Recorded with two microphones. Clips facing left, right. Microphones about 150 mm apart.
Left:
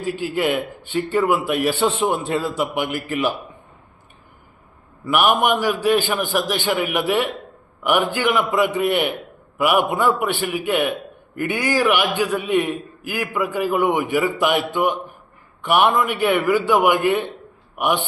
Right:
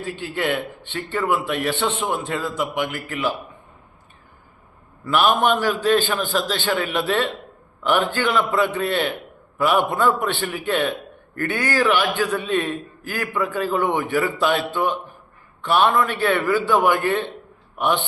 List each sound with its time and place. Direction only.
0.0 s a man's voice: 10° left (ahead or behind)
1.9 s a man's voice: 30° left (ahead or behind)
2.7 s a man's voice: 10° left (ahead or behind)
5.0 s a man's voice: 15° left (ahead or behind)